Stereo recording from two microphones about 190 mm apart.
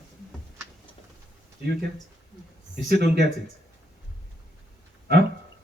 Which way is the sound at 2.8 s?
60° right (ahead or behind).